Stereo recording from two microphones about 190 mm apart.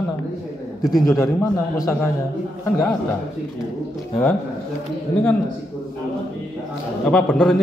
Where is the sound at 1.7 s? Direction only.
15° left (ahead or behind).